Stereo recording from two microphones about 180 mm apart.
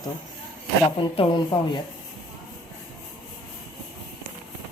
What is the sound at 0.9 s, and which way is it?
Speech, 30° left (ahead or behind).